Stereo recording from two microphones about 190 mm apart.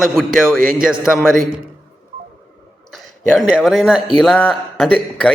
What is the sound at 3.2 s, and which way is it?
A man's voice, 5° left (ahead or behind).